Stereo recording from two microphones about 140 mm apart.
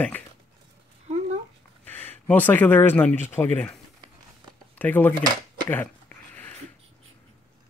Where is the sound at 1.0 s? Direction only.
55° right (ahead or behind).